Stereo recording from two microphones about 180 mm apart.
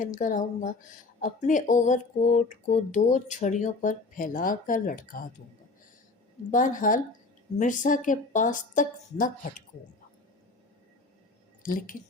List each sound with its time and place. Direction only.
0.0 s speech: 45° left (ahead or behind)
6.5 s speech: 45° left (ahead or behind)
11.6 s speech: 50° left (ahead or behind)